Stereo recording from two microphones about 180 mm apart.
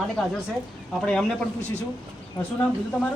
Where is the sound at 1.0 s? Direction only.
5° left (ahead or behind).